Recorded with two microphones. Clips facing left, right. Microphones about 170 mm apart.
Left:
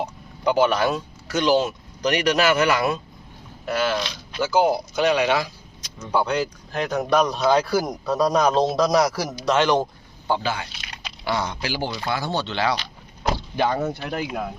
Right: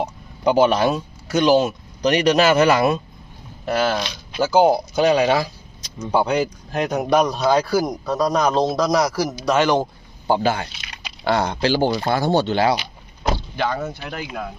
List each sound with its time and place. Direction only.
0.0 s speech: 20° right (ahead or behind)
3.7 s speech: 40° right (ahead or behind)
6.0 s speech: 20° right (ahead or behind)
7.4 s a man's voice: centre (ahead or behind)
10.2 s speech: 40° right (ahead or behind)
11.2 s speech: 60° right (ahead or behind)
11.9 s speech: 45° right (ahead or behind)
12.7 s a sound: 10° right (ahead or behind)
13.6 s speech: 20° left (ahead or behind)
14.2 s a man's voice: 5° left (ahead or behind)